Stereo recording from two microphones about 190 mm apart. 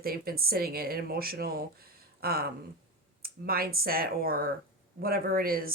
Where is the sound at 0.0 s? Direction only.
50° right (ahead or behind).